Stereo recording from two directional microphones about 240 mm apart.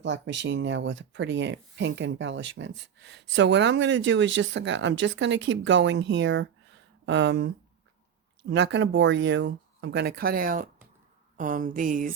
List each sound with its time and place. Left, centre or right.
0.0 s speech: right